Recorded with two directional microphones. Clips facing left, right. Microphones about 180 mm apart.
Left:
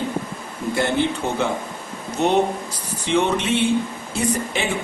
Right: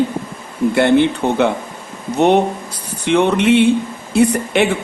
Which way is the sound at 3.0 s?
60° right (ahead or behind).